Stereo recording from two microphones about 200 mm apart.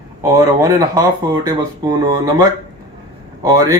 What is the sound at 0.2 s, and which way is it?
Speech, 15° right (ahead or behind).